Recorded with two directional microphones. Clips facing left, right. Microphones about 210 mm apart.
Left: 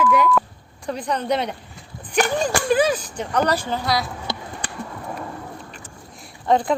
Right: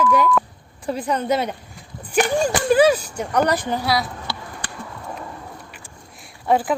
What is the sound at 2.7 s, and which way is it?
Speech, 10° right (ahead or behind).